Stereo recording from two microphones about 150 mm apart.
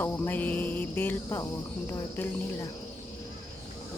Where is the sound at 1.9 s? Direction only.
20° left (ahead or behind).